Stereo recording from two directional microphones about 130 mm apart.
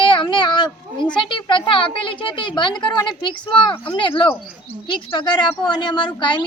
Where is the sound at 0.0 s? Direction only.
40° left (ahead or behind).